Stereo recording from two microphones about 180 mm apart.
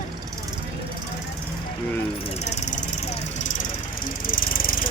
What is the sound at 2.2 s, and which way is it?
Vehicle, 35° left (ahead or behind).